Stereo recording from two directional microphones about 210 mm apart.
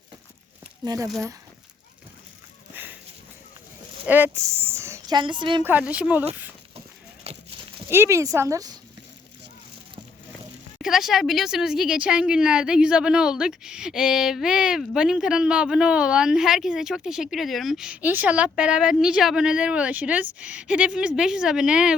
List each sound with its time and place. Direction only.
0.9 s a woman's voice: 15° right (ahead or behind)
2.7 s a sound: 10° right (ahead or behind)
4.0 s a woman's voice: 10° right (ahead or behind)
5.6 s a woman's voice: 5° right (ahead or behind)
7.3 s livestock: 30° right (ahead or behind)
7.9 s speech: 10° right (ahead or behind)
10.8 s speech: centre (ahead or behind)